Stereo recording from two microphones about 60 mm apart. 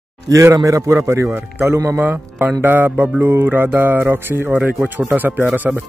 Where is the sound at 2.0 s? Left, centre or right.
Right.